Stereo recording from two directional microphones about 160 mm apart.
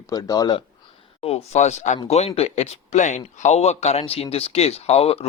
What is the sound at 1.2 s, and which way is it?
Speech, 40° left (ahead or behind).